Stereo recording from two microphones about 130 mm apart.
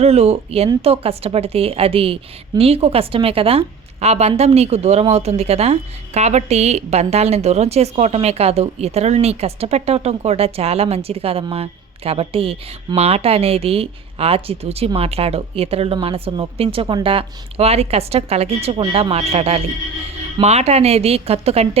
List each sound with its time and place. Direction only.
0.0 s a woman's voice: 55° right (ahead or behind)